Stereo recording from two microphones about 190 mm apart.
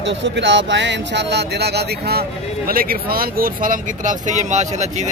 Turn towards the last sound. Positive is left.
turn(degrees=-40)  # may be behind; listen again after turning